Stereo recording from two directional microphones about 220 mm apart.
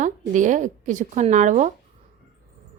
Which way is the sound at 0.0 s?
35° right (ahead or behind).